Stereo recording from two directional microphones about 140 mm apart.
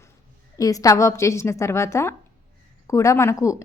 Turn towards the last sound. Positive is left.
turn(degrees=20)  # may be behind; listen again after turning